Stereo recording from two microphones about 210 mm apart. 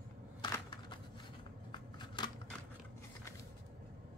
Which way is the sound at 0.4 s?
20° left (ahead or behind).